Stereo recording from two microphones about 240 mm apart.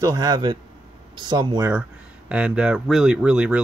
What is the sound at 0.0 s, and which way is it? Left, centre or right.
Speech, centre.